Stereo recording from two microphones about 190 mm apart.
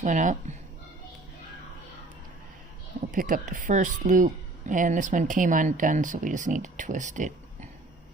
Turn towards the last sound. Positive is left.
turn(degrees=-40)  # may be behind; listen again after turning